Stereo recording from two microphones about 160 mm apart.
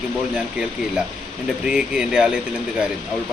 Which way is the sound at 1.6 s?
5° right (ahead or behind).